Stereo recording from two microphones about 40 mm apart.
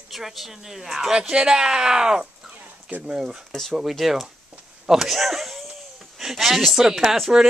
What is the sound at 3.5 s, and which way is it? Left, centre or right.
Speech, centre.